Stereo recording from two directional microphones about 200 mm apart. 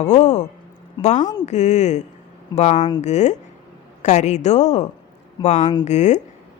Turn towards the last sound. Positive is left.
turn(degrees=35)  # may be behind; listen again after turning